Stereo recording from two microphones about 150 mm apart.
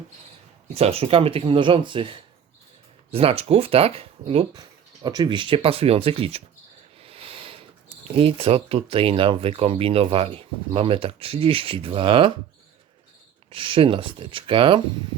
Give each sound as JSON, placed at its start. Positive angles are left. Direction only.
{"t": 0.7, "sound": "speech", "side_deg": -40}
{"t": 13.5, "sound": "speech", "side_deg": -35}